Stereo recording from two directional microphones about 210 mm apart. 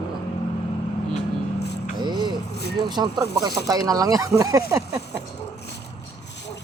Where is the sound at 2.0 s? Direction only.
20° right (ahead or behind).